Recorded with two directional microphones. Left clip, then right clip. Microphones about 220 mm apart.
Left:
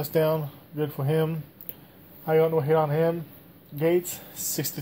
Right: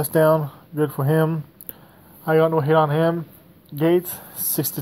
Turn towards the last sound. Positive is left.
turn(degrees=-25)  # may be behind; listen again after turning